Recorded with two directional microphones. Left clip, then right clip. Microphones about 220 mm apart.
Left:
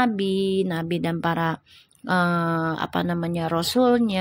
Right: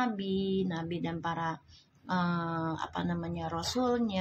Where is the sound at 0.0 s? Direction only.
40° left (ahead or behind).